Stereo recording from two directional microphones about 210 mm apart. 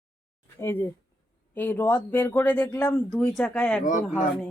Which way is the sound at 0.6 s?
10° left (ahead or behind).